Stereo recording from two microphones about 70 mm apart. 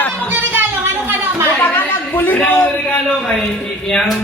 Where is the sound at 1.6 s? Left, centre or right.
Left.